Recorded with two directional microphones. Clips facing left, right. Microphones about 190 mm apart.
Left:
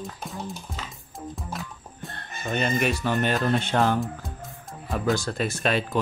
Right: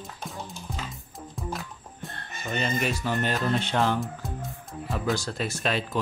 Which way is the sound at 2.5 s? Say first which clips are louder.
Left 3 dB; 60° left (ahead or behind).